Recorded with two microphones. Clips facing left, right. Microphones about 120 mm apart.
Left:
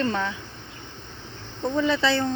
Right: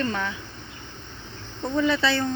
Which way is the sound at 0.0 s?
25° left (ahead or behind).